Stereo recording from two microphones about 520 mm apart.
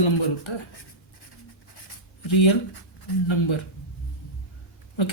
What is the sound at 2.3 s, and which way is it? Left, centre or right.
Speech, left.